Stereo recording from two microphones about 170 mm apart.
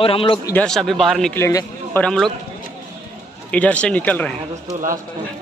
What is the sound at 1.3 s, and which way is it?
Speech, 15° left (ahead or behind).